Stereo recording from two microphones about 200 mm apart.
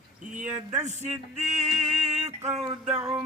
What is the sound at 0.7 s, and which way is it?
Speech, 35° right (ahead or behind).